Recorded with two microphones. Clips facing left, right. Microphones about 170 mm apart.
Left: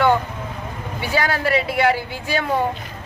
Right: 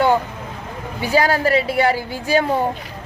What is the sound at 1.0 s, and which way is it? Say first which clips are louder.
Speech: right 4 dB; 40° right (ahead or behind).